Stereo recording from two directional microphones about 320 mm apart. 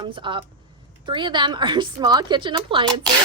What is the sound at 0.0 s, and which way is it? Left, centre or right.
Speech, centre.